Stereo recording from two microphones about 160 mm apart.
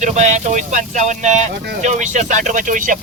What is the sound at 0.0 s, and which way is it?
A man's voice, 45° right (ahead or behind).